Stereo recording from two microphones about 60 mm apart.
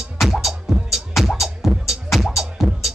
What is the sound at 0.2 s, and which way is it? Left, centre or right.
Music, centre.